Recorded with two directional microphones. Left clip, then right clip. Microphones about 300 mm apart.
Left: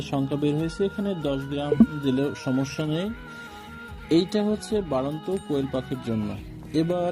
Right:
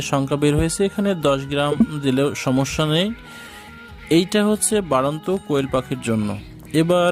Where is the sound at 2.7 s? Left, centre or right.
Right.